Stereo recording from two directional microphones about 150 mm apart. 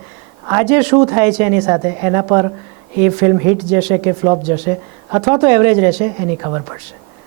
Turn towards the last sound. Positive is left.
turn(degrees=-25)  # may be behind; listen again after turning